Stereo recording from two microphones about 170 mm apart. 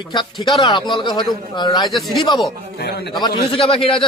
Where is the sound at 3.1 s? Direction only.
25° left (ahead or behind).